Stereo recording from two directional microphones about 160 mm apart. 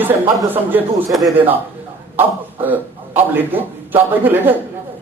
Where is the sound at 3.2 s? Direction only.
10° right (ahead or behind).